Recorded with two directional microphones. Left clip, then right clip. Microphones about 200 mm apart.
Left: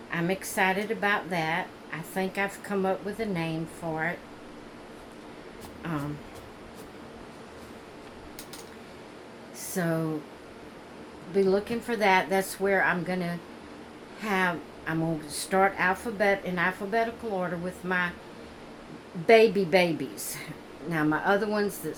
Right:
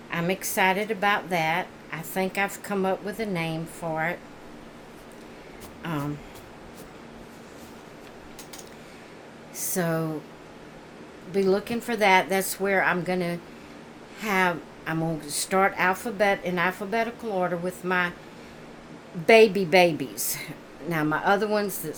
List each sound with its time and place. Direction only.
0.1 s speech: 50° right (ahead or behind)
5.8 s speech: 50° right (ahead or behind)
9.6 s a sound: 50° right (ahead or behind)
11.3 s speech: 50° right (ahead or behind)
19.2 s speech: 50° right (ahead or behind)